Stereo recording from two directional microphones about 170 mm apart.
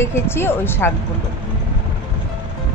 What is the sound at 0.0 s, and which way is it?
Speech, 15° left (ahead or behind).